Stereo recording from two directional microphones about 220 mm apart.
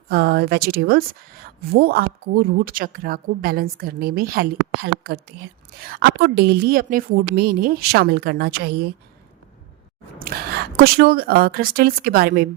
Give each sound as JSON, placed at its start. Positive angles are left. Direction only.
{"t": 0.1, "sound": "a woman's voice", "side_deg": -45}
{"t": 10.2, "sound": "speech", "side_deg": -45}